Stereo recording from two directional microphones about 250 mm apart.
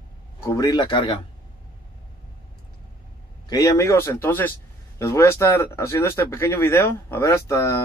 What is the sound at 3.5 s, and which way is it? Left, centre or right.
Speech, centre.